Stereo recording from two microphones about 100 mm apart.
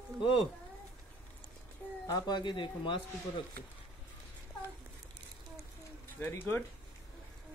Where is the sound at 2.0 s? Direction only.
40° left (ahead or behind).